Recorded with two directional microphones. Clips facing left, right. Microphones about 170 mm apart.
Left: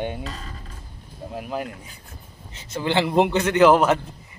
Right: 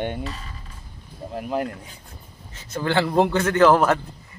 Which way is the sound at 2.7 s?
15° left (ahead or behind).